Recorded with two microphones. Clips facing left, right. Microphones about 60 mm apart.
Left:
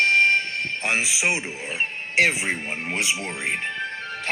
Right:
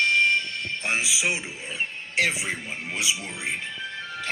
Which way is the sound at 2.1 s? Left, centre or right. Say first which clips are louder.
Left 4 dB; left.